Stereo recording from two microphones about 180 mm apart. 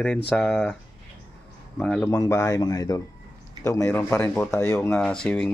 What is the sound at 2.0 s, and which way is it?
Speech, 15° left (ahead or behind).